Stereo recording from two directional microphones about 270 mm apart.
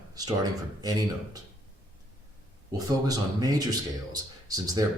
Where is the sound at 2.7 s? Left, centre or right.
Centre.